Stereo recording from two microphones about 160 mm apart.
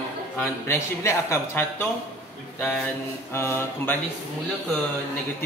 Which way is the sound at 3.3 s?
15° left (ahead or behind).